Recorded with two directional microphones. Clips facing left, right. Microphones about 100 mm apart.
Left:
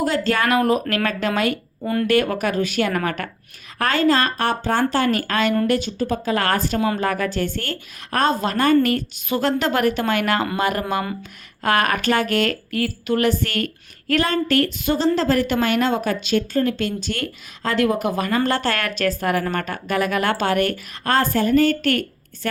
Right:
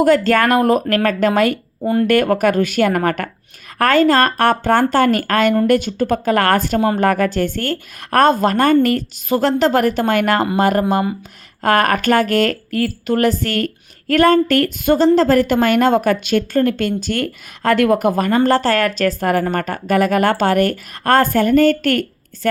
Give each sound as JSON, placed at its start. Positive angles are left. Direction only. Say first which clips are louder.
{"t": 0.0, "sound": "a woman's voice", "louder": "right 7 dB", "side_deg": -50}
{"t": 1.8, "sound": "speech", "louder": "right 6 dB", "side_deg": -25}
{"t": 2.0, "sound": "a woman's voice", "louder": "right 5 dB", "side_deg": -50}
{"t": 6.7, "sound": "speech", "louder": "right 5 dB", "side_deg": -35}
{"t": 7.0, "sound": "a woman's voice", "louder": "right 6 dB", "side_deg": -55}